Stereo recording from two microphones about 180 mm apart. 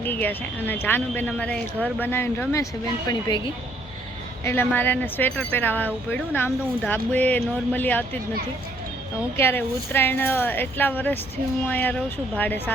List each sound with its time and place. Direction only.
0.0 s a woman's voice: 10° left (ahead or behind)
4.4 s speech: 10° left (ahead or behind)
9.3 s speech: 10° left (ahead or behind)